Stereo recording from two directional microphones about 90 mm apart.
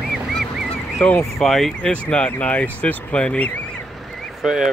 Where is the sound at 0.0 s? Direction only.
Centre (ahead or behind).